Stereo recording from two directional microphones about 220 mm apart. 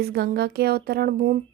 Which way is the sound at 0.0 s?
45° right (ahead or behind).